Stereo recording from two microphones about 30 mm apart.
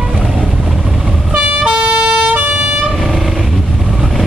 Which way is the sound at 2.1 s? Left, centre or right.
Right.